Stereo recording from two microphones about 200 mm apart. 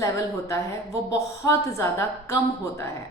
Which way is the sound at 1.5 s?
15° left (ahead or behind).